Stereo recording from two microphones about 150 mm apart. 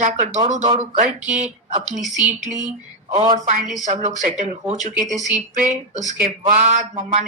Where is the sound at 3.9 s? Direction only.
50° right (ahead or behind).